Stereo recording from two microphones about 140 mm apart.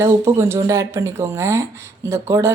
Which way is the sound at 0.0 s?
15° right (ahead or behind).